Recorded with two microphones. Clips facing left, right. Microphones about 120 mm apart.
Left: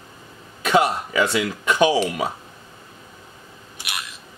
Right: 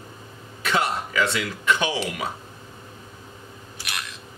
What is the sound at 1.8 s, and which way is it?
Speech, 40° left (ahead or behind).